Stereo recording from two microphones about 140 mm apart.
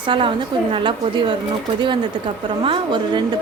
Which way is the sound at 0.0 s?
35° right (ahead or behind).